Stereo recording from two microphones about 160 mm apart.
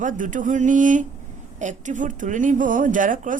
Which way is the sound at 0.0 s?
55° right (ahead or behind).